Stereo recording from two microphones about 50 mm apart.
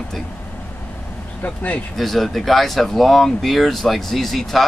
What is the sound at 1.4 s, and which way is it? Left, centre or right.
Speech, left.